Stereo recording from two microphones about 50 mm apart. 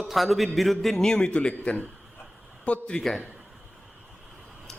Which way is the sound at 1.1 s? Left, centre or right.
Left.